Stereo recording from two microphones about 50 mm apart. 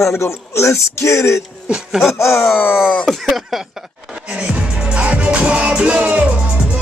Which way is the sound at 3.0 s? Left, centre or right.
Centre.